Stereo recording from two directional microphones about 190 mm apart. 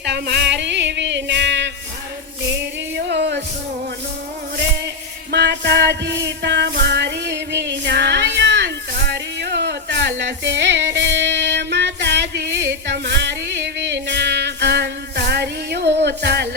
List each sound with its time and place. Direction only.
0.0 s music: 65° right (ahead or behind)
3.1 s music: 65° right (ahead or behind)
5.3 s music: 65° right (ahead or behind)